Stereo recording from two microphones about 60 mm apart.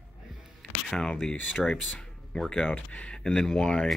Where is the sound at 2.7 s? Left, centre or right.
Centre.